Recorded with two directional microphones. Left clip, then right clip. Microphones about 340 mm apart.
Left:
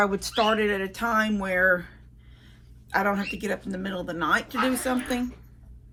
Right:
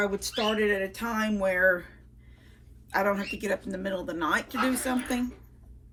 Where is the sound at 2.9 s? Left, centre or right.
Centre.